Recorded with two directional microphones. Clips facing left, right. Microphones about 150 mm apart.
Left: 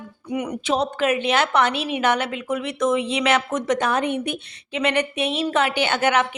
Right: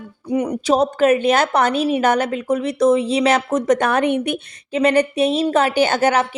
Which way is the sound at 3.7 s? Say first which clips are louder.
Right 4 dB; 60° right (ahead or behind).